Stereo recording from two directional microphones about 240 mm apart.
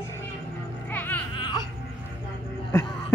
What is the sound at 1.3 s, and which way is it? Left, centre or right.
Music, left.